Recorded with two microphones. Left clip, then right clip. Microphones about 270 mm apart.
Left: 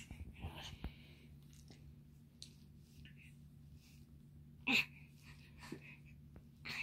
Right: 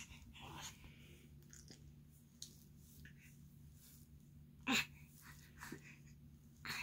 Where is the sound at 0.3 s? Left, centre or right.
Centre.